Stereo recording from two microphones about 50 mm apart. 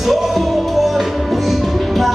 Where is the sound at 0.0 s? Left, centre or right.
Centre.